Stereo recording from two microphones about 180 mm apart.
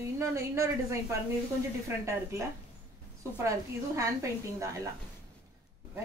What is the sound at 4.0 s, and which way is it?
Speech, 15° right (ahead or behind).